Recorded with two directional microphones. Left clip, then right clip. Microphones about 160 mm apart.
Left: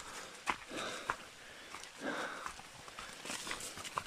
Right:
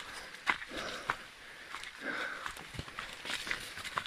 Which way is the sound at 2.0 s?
10° left (ahead or behind).